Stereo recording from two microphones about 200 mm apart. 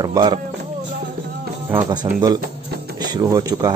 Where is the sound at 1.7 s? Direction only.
20° right (ahead or behind).